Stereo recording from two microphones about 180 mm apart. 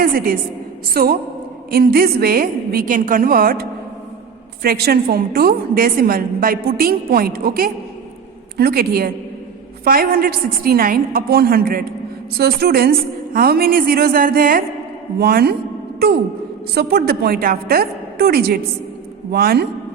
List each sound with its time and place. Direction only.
0.0 s a woman's voice: 55° right (ahead or behind)
16.7 s a woman's voice: 60° right (ahead or behind)